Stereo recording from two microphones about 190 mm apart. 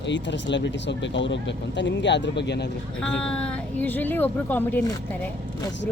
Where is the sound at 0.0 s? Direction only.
70° left (ahead or behind).